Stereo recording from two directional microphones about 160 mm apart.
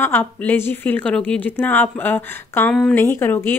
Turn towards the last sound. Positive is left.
turn(degrees=15)  # may be behind; listen again after turning